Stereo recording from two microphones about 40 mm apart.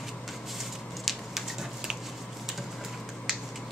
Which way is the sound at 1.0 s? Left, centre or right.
Centre.